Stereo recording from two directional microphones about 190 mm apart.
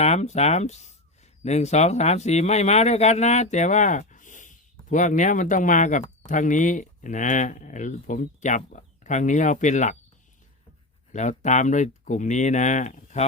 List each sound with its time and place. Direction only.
0.0 s speech: 35° left (ahead or behind)
11.1 s speech: 40° left (ahead or behind)